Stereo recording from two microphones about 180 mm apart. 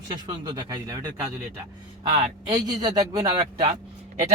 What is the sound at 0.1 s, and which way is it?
A man's voice, 20° right (ahead or behind).